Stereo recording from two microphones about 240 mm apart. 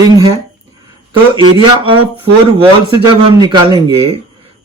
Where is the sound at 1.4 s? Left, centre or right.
Right.